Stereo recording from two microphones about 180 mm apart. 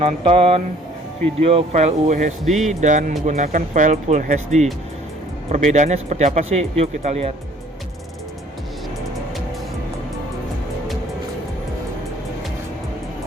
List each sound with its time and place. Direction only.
0.3 s speech: 30° right (ahead or behind)
2.4 s speech: centre (ahead or behind)
2.8 s speech: 45° right (ahead or behind)